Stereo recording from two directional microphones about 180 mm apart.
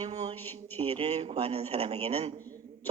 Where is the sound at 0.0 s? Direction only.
35° right (ahead or behind).